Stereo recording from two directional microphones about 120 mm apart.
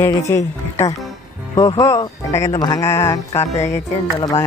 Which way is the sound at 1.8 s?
30° left (ahead or behind).